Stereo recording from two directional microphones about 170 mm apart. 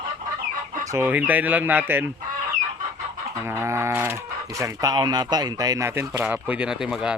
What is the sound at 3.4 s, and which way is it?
Speech, 15° right (ahead or behind).